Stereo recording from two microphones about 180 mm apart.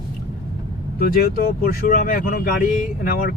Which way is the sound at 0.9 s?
60° left (ahead or behind).